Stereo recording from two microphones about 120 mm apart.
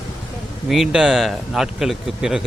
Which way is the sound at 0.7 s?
5° right (ahead or behind).